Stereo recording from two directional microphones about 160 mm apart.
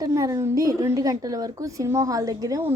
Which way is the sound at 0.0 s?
20° right (ahead or behind).